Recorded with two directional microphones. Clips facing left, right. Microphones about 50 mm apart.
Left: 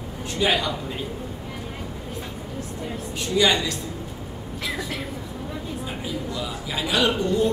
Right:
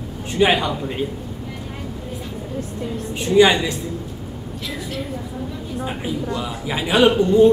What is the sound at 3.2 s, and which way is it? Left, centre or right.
Speech, right.